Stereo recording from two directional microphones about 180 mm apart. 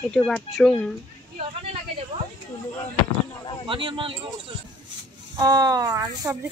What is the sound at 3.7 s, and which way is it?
Speech, 30° right (ahead or behind).